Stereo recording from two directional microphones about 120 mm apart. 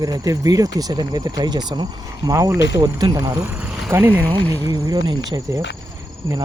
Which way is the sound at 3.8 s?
20° right (ahead or behind).